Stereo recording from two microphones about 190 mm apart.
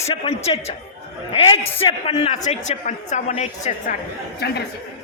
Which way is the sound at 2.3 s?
35° left (ahead or behind).